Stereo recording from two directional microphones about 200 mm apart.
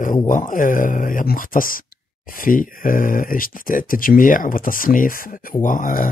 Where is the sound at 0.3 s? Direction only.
40° left (ahead or behind).